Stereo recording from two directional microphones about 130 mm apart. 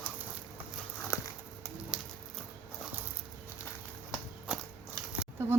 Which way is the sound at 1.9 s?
5° right (ahead or behind).